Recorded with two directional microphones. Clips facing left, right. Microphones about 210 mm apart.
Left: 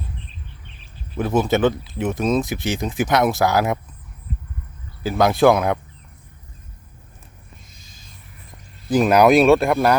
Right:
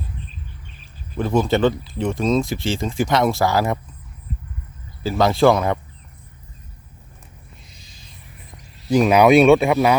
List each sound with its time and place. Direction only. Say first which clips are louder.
1.1 s speech: even; 5° left (ahead or behind)
2.4 s speech: right 1 dB; 15° left (ahead or behind)
3.1 s speech: left 1 dB; centre (ahead or behind)
5.1 s speech: even; centre (ahead or behind)
8.9 s speech: right 1 dB; centre (ahead or behind)